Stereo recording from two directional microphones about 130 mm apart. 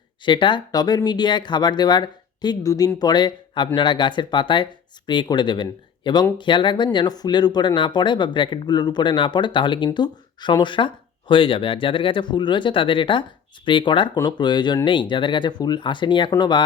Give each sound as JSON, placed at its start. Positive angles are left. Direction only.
{"t": 0.3, "sound": "speech", "side_deg": 40}